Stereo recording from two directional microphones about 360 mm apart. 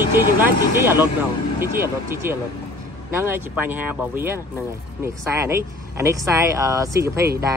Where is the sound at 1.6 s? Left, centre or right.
Centre.